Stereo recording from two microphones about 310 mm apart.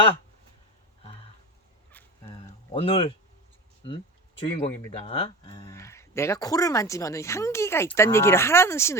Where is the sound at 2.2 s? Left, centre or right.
Centre.